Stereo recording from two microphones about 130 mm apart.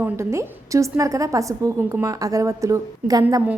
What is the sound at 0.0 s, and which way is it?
A woman's voice, 20° right (ahead or behind).